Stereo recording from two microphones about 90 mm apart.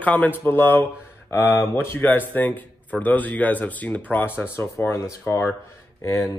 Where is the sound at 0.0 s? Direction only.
15° left (ahead or behind).